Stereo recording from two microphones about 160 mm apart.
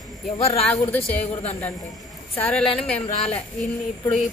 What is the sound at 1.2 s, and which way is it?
Speech, 40° left (ahead or behind).